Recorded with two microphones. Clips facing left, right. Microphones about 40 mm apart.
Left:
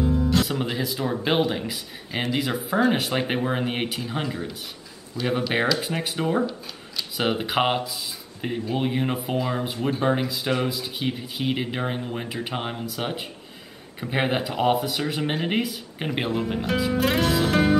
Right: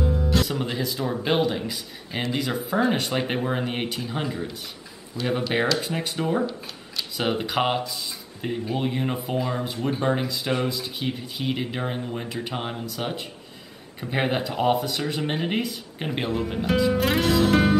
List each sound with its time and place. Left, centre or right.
0.0 s speech: centre
16.6 s music: centre